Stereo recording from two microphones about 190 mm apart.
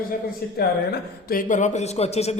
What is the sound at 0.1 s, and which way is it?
Speech, 55° left (ahead or behind).